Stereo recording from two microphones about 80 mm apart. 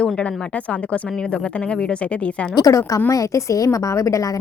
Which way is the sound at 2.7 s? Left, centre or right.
Left.